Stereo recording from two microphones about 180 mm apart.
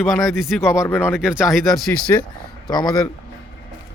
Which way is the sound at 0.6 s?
15° left (ahead or behind).